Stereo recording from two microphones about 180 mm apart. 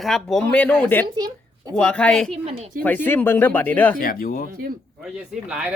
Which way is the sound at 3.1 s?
10° left (ahead or behind).